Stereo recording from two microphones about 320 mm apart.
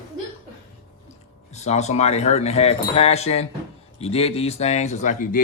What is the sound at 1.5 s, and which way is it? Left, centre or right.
Speech, left.